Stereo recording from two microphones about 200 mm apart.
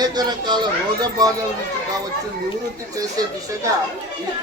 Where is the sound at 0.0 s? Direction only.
20° right (ahead or behind).